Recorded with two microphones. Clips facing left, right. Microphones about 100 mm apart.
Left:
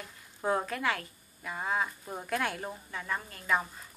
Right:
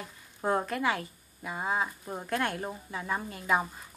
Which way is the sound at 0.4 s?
5° right (ahead or behind).